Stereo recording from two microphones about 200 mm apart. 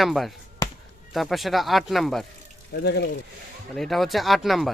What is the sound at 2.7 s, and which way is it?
Speech, 55° left (ahead or behind).